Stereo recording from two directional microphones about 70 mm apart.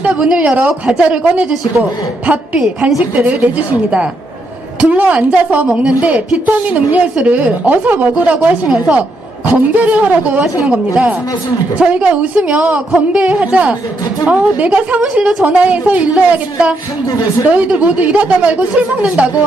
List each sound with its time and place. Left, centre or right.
0.0 s a woman's voice: centre
11.8 s a woman's voice: centre
13.3 s a woman's voice: right